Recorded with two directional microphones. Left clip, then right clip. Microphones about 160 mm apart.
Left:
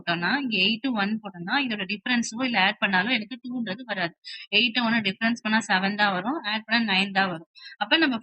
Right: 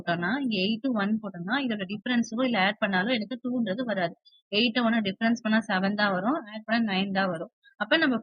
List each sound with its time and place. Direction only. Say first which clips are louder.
0.0 s a woman's voice: left 3 dB; 35° right (ahead or behind)